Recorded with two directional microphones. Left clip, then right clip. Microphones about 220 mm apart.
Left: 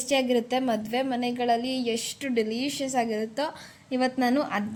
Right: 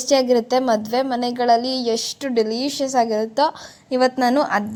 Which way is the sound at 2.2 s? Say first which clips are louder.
Right 6 dB; 25° right (ahead or behind).